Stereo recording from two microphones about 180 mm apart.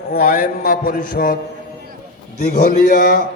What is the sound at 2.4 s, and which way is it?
Speech, 50° left (ahead or behind).